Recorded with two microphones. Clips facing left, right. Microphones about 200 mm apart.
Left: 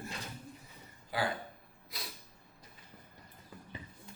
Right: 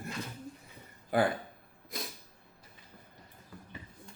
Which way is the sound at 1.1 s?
55° right (ahead or behind).